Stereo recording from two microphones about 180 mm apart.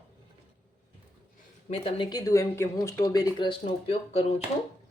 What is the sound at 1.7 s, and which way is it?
Speech, 35° left (ahead or behind).